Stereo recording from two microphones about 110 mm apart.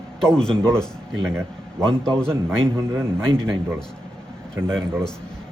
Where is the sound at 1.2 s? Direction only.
25° right (ahead or behind).